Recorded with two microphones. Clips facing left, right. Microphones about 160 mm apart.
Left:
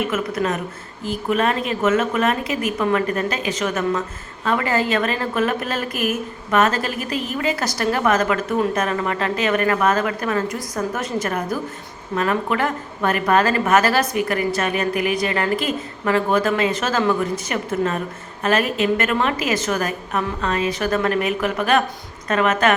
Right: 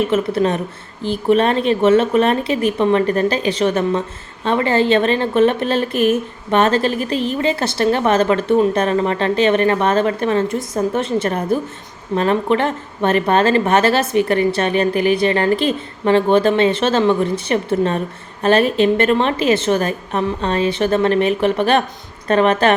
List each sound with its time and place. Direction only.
0.1 s a woman's voice: 30° right (ahead or behind)